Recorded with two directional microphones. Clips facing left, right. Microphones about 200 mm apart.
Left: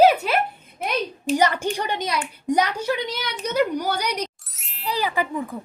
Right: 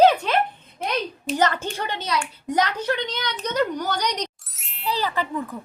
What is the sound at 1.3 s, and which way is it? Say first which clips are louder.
A woman's voice: left 3 dB; 10° left (ahead or behind).